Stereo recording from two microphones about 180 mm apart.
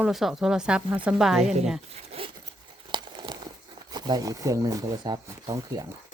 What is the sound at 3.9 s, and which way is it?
Speech, 20° right (ahead or behind).